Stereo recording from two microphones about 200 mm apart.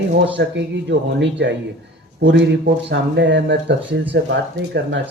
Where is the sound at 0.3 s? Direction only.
60° right (ahead or behind).